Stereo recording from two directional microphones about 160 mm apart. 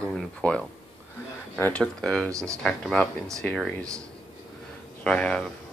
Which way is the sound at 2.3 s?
20° right (ahead or behind).